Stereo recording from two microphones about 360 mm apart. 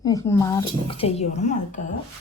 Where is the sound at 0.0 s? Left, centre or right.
Centre.